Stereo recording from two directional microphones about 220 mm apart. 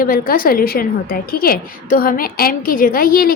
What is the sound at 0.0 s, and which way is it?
A woman's voice, 40° left (ahead or behind).